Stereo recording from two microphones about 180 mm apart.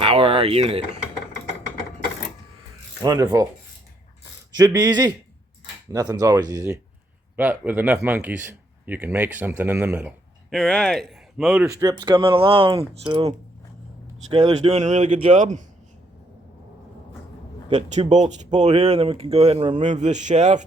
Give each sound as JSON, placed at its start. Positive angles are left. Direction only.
{"t": 0.0, "sound": "mechanisms", "side_deg": -30}
{"t": 3.0, "sound": "speech", "side_deg": -20}
{"t": 4.5, "sound": "speech", "side_deg": -20}
{"t": 7.3, "sound": "speech", "side_deg": -10}
{"t": 10.5, "sound": "speech", "side_deg": 5}
{"t": 11.7, "sound": "speech", "side_deg": -20}
{"t": 14.5, "sound": "speech", "side_deg": -35}
{"t": 17.7, "sound": "speech", "side_deg": -40}